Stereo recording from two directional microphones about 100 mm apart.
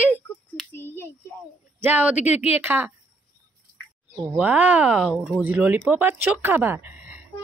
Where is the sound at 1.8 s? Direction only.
20° right (ahead or behind).